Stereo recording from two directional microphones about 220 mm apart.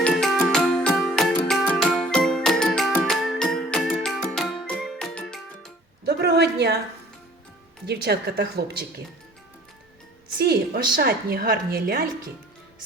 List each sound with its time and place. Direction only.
0.0 s music: centre (ahead or behind)
6.1 s a sound: 50° right (ahead or behind)
7.9 s a woman's voice: 50° right (ahead or behind)
10.3 s a woman's voice: 45° right (ahead or behind)